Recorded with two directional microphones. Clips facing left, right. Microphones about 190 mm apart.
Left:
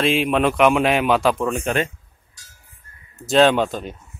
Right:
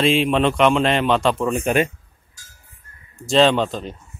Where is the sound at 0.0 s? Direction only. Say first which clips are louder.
Right 1 dB; centre (ahead or behind).